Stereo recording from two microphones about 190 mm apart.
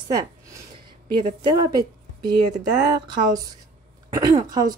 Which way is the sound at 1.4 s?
20° right (ahead or behind).